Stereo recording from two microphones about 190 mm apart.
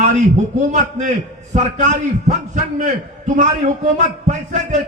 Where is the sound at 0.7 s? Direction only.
40° right (ahead or behind).